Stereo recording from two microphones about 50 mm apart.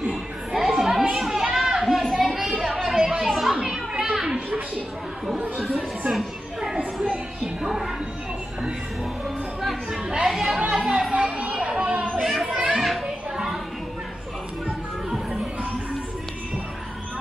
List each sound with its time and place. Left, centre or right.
0.0 s chatter: centre
1.1 s children playing: centre
2.0 s a sound: centre
3.5 s children playing: centre
5.6 s chatter: centre
6.6 s a sound: centre
10.2 s chatter: centre
10.6 s chatter: centre
11.3 s children playing: right
12.2 s a sound: centre
12.7 s children playing: centre